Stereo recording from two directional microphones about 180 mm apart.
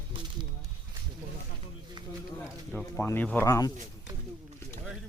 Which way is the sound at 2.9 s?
15° left (ahead or behind).